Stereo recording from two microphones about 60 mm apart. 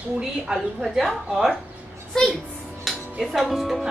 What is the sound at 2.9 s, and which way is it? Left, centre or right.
Speech, centre.